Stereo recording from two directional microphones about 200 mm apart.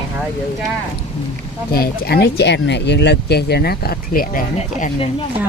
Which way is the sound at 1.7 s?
50° left (ahead or behind).